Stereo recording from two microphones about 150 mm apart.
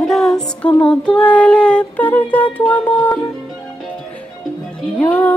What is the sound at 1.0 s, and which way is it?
Child singing, 10° left (ahead or behind).